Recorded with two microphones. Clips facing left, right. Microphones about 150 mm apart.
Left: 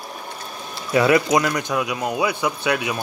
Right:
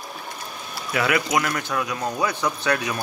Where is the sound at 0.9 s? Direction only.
25° left (ahead or behind).